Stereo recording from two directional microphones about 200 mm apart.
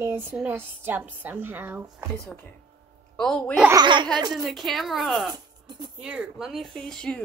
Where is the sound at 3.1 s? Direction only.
5° left (ahead or behind).